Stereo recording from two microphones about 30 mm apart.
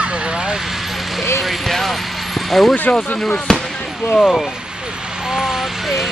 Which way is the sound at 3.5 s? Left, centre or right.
Left.